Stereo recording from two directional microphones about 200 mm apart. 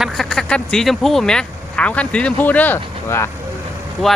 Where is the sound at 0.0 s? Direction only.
Centre (ahead or behind).